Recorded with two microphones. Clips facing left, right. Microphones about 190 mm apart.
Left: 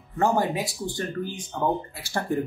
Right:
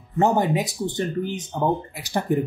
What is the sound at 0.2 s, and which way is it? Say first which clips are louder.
Speech: right 3 dB; 20° right (ahead or behind).